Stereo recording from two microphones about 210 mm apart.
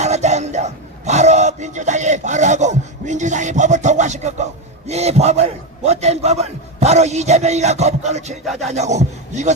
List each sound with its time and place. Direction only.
0.0 s a man's voice: 30° right (ahead or behind)